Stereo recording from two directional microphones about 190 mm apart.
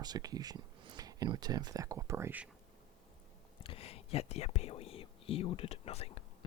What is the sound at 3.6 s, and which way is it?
Whispering, 30° left (ahead or behind).